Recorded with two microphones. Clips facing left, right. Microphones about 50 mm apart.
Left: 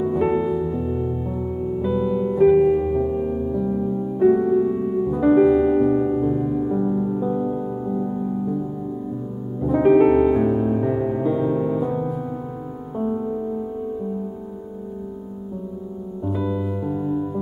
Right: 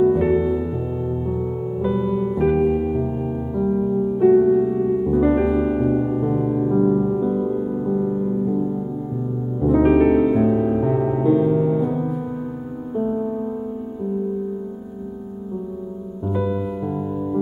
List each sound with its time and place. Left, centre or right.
0.1 s music: centre
7.2 s music: centre
7.8 s music: centre
9.7 s music: centre
16.3 s music: centre